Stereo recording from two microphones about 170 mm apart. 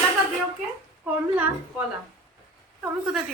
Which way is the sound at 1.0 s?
10° right (ahead or behind).